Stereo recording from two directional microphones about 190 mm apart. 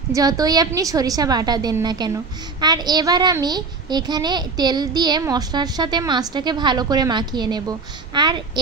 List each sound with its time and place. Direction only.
0.1 s a woman's voice: 20° right (ahead or behind)